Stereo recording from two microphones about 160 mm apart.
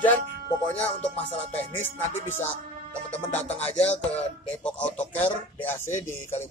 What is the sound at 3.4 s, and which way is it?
Music, 40° left (ahead or behind).